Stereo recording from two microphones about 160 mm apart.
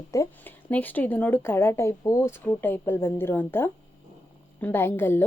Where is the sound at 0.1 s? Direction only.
15° left (ahead or behind).